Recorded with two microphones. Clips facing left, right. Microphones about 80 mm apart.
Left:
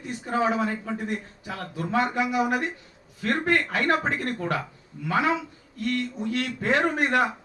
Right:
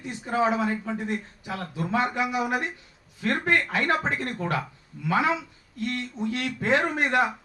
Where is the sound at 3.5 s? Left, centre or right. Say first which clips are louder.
Left 1 dB; right.